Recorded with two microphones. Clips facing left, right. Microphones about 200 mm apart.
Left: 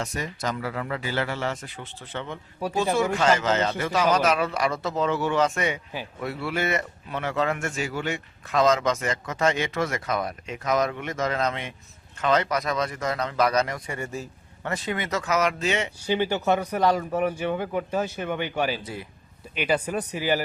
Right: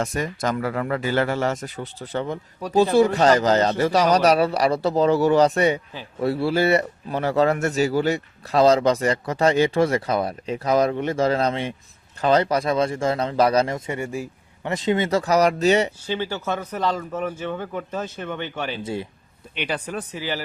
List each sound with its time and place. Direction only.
0.0 s a man's voice: 50° right (ahead or behind)
16.0 s speech: 15° left (ahead or behind)
18.8 s speech: 25° right (ahead or behind)
19.5 s speech: 5° left (ahead or behind)